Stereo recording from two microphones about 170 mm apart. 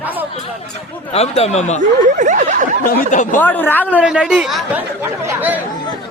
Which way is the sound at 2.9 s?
50° left (ahead or behind).